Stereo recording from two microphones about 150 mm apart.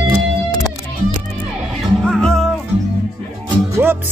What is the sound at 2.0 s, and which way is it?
Music, 5° left (ahead or behind).